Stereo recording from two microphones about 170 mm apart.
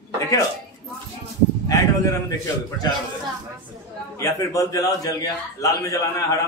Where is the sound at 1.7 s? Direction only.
20° left (ahead or behind).